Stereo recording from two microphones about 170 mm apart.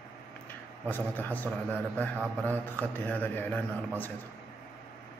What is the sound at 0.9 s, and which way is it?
Mantra, 10° left (ahead or behind).